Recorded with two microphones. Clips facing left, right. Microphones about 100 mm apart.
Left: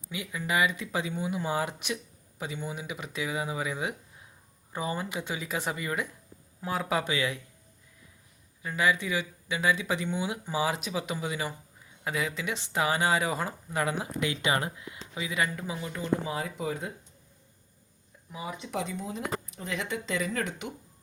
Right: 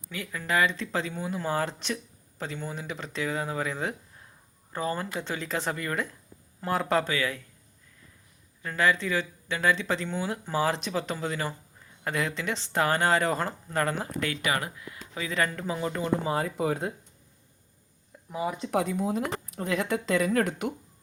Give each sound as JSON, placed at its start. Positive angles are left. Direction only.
{"t": 0.1, "sound": "a man's voice", "side_deg": 15}
{"t": 7.1, "sound": "speech", "side_deg": 20}
{"t": 8.6, "sound": "speech", "side_deg": 10}
{"t": 16.0, "sound": "speech", "side_deg": -50}
{"t": 18.3, "sound": "speech", "side_deg": -50}
{"t": 19.7, "sound": "speech", "side_deg": -45}